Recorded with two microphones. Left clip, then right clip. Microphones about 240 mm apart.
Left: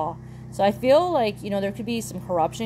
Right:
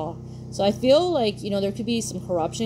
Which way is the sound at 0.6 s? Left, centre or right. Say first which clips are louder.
Even; left.